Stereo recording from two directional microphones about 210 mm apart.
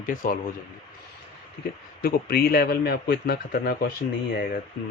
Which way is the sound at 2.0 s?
45° left (ahead or behind).